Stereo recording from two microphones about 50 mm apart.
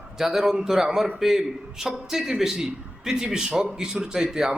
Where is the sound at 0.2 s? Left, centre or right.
Centre.